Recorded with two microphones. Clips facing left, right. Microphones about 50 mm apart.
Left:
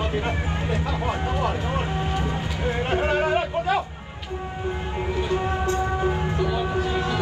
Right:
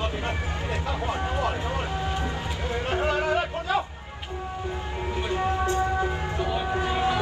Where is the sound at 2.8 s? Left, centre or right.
Left.